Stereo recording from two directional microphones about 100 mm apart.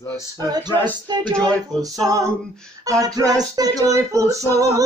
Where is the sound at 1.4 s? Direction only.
10° left (ahead or behind).